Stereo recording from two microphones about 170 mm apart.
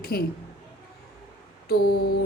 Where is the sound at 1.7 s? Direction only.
65° left (ahead or behind).